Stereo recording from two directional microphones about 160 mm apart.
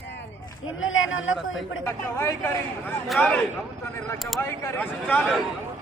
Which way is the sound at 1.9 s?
15° left (ahead or behind).